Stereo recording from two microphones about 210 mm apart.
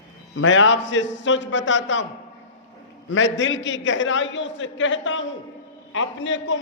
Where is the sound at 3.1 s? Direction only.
65° left (ahead or behind).